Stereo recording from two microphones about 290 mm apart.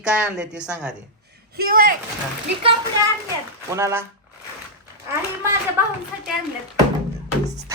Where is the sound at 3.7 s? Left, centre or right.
Centre.